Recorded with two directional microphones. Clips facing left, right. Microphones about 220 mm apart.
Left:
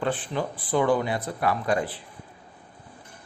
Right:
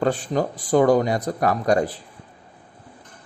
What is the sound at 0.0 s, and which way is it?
Speech, 40° right (ahead or behind).